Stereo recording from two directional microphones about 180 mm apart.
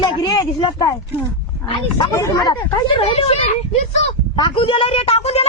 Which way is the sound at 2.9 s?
35° left (ahead or behind).